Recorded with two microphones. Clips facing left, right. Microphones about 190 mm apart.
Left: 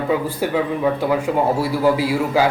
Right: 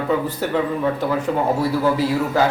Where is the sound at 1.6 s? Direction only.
10° left (ahead or behind).